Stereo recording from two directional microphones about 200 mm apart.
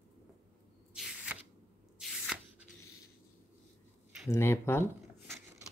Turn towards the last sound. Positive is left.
turn(degrees=10)  # may be behind; listen again after turning